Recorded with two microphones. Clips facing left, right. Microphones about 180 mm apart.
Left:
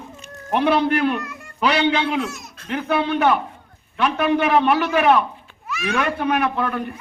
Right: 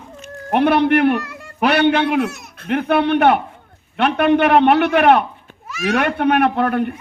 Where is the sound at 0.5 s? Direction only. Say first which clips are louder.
Right 4 dB; 60° right (ahead or behind).